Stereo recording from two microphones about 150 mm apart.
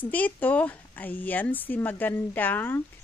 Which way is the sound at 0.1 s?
10° left (ahead or behind).